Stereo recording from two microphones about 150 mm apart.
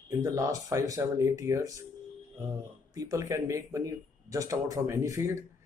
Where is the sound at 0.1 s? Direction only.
20° right (ahead or behind).